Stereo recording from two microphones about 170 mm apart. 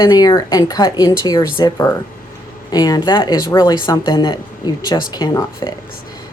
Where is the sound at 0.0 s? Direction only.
20° left (ahead or behind).